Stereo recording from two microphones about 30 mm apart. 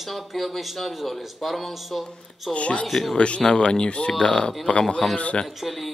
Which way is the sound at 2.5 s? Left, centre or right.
Left.